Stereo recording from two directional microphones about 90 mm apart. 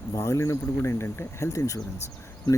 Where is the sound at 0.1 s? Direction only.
35° left (ahead or behind).